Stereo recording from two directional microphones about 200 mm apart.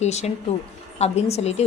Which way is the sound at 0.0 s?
35° left (ahead or behind).